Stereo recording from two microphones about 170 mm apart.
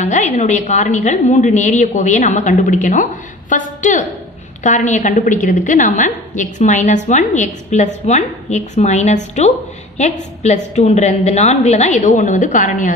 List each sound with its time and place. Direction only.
0.0 s a woman's voice: 40° left (ahead or behind)